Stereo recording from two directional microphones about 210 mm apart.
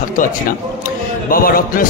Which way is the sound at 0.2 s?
40° left (ahead or behind).